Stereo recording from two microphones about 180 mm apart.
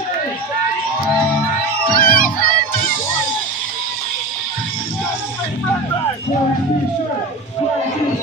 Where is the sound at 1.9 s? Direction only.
55° left (ahead or behind).